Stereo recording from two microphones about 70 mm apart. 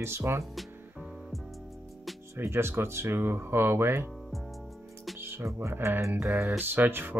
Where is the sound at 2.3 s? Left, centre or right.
Right.